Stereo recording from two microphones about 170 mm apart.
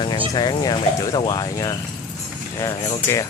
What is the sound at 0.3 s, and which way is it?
Speech, 25° left (ahead or behind).